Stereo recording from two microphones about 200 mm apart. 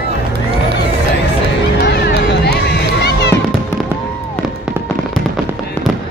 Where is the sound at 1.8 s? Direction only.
55° left (ahead or behind).